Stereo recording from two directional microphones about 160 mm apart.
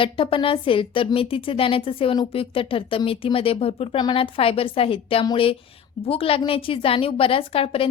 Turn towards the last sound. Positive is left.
turn(degrees=35)  # may be behind; listen again after turning